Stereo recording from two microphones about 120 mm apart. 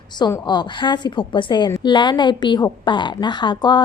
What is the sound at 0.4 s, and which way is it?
A woman's voice, 40° left (ahead or behind).